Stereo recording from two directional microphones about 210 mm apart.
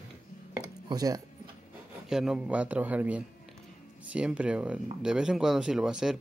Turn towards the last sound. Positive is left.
turn(degrees=-5)  # may be behind; listen again after turning